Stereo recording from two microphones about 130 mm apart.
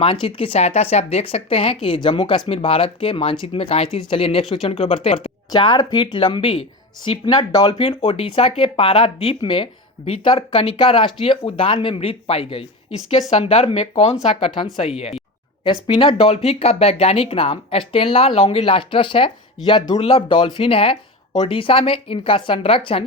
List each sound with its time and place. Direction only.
0.0 s speech: 45° left (ahead or behind)